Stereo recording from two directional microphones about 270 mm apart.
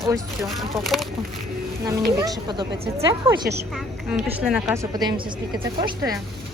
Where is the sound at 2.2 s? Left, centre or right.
Centre.